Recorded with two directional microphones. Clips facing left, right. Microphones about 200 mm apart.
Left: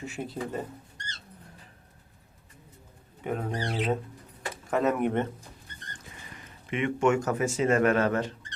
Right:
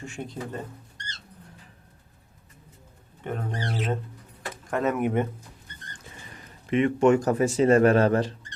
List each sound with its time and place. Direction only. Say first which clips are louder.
0.0 s speech: left 1 dB; 5° left (ahead or behind)
3.2 s speech: left 1 dB; 5° left (ahead or behind)
6.7 s speech: right 5 dB; 35° right (ahead or behind)